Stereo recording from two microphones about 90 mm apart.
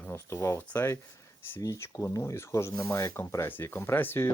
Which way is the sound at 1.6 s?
35° left (ahead or behind).